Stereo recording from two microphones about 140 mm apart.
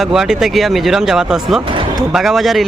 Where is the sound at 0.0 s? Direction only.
5° right (ahead or behind).